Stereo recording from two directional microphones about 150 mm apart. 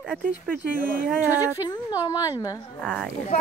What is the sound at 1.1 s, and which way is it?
Speech, 15° right (ahead or behind).